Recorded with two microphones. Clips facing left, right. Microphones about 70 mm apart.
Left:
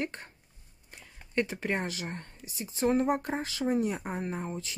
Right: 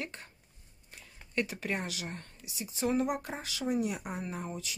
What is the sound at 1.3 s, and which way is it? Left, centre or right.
Speech, left.